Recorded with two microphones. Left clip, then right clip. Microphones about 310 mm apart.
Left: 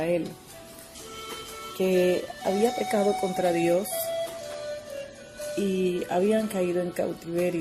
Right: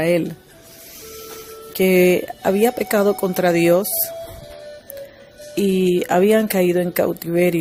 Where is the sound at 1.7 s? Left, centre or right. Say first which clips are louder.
Right 9 dB; right.